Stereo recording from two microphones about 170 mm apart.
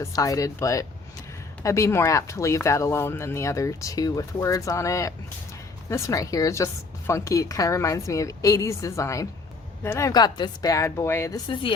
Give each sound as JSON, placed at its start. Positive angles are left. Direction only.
{"t": 0.0, "sound": "a woman's voice", "side_deg": 20}
{"t": 11.4, "sound": "a woman's voice", "side_deg": 30}